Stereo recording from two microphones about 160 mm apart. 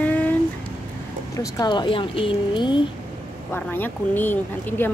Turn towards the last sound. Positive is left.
turn(degrees=10)  # may be behind; listen again after turning